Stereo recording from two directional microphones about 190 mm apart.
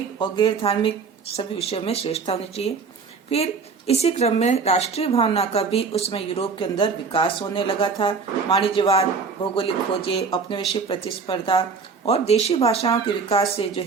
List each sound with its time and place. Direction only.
0.2 s a woman's voice: 25° left (ahead or behind)